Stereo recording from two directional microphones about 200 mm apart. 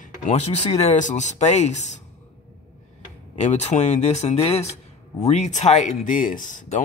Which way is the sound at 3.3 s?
35° left (ahead or behind).